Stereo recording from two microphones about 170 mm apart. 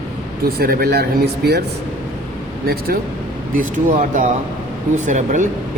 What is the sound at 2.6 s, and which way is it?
Speech, 65° right (ahead or behind).